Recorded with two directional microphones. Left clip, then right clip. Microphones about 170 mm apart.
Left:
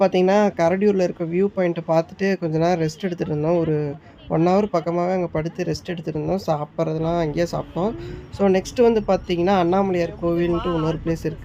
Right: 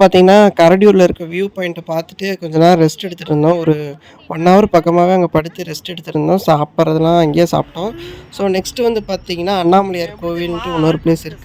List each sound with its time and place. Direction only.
0.0 s speech: 50° right (ahead or behind)